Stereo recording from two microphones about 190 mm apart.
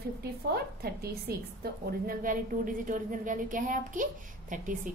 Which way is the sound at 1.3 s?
55° right (ahead or behind).